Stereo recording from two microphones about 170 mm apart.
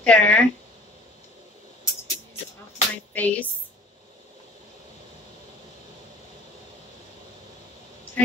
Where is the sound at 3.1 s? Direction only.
10° left (ahead or behind).